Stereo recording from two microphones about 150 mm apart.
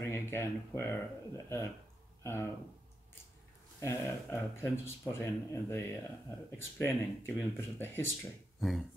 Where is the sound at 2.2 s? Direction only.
15° left (ahead or behind).